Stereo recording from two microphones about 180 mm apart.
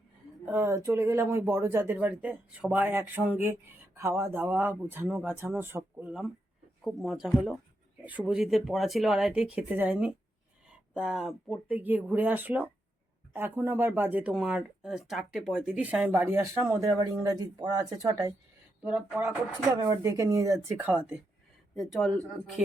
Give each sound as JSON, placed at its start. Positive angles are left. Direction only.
{"t": 0.4, "sound": "speech", "side_deg": -15}
{"t": 18.8, "sound": "speech", "side_deg": -5}
{"t": 19.6, "sound": "speech", "side_deg": -20}
{"t": 21.8, "sound": "speech", "side_deg": 0}